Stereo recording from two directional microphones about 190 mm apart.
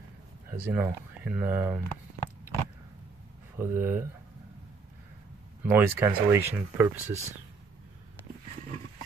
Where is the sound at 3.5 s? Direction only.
10° right (ahead or behind).